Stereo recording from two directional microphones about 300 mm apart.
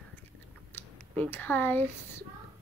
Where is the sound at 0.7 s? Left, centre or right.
Centre.